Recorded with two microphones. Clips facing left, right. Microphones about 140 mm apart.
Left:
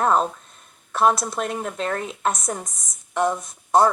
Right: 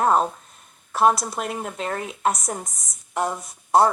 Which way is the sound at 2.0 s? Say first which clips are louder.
Right 1 dB; 30° left (ahead or behind).